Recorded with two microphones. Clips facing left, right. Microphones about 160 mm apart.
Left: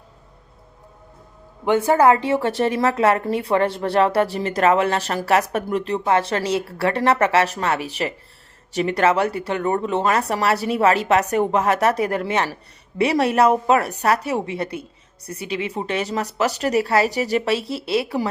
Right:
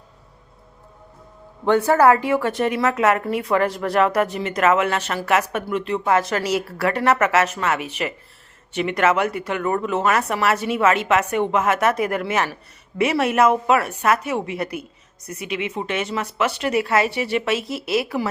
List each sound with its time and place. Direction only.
1.6 s a woman's voice: 15° left (ahead or behind); by 18.3 s 30° left (ahead or behind)